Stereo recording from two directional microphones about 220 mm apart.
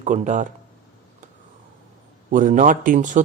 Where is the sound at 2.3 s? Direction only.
35° right (ahead or behind).